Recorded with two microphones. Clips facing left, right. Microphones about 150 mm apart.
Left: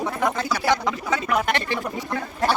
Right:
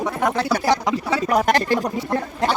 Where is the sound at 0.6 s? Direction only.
35° right (ahead or behind).